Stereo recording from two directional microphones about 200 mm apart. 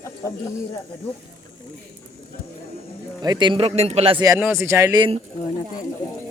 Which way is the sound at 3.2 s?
20° right (ahead or behind).